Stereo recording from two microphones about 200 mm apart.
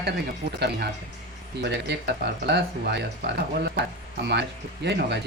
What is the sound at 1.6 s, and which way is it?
Speech, 60° right (ahead or behind).